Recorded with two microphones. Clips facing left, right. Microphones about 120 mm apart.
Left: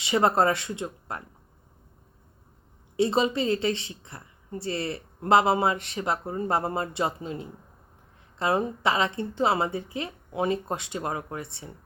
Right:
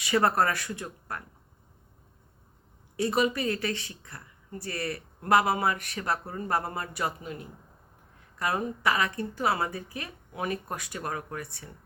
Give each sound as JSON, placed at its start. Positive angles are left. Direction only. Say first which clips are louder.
{"t": 0.0, "sound": "a woman's voice", "louder": "left 2 dB", "side_deg": 20}
{"t": 2.9, "sound": "a woman's voice", "louder": "left 3 dB", "side_deg": 25}